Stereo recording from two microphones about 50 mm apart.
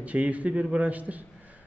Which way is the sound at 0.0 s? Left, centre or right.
Right.